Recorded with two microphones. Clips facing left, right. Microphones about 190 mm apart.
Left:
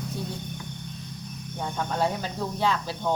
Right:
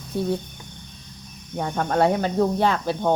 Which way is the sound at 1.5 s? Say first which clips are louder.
Right 7 dB; 60° right (ahead or behind).